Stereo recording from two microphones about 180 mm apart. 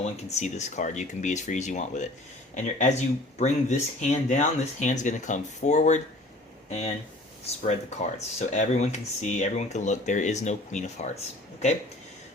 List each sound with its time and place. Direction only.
0.0 s speech: 40° left (ahead or behind)